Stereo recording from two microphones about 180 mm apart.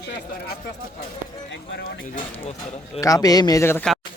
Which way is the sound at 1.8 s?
55° left (ahead or behind).